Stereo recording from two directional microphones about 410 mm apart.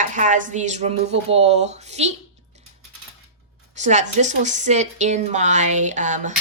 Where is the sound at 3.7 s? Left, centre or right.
Centre.